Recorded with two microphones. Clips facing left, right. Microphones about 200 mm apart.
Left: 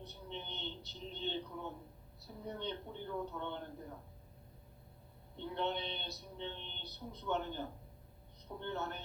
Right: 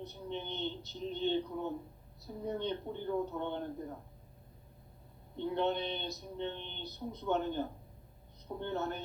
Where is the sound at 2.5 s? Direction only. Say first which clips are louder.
Right 6 dB; 45° right (ahead or behind).